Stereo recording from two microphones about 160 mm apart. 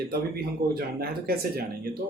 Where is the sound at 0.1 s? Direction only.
75° right (ahead or behind).